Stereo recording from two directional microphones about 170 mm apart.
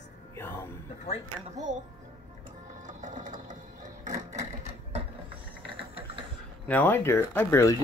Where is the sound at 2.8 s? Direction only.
45° right (ahead or behind).